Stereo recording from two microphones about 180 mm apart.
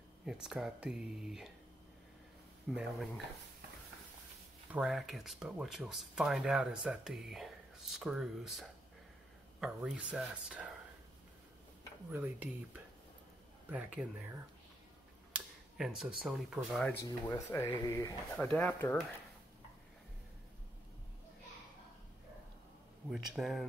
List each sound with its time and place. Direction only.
0.2 s speech: 5° right (ahead or behind)
2.7 s speech: centre (ahead or behind)
4.7 s speech: centre (ahead or behind)
12.1 s speech: 10° right (ahead or behind)
13.7 s speech: 5° right (ahead or behind)
15.3 s speech: 5° right (ahead or behind)
17.0 s speech: 15° left (ahead or behind)
18.3 s speech: 5° left (ahead or behind)
23.0 s speech: centre (ahead or behind)